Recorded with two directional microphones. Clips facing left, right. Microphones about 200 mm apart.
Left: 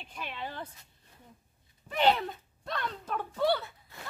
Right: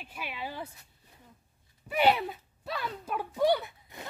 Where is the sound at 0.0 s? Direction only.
5° right (ahead or behind).